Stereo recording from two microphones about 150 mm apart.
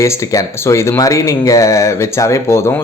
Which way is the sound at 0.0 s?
20° left (ahead or behind).